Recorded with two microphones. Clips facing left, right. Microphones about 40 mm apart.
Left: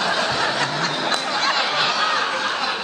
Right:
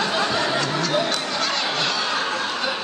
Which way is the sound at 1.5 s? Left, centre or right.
Left.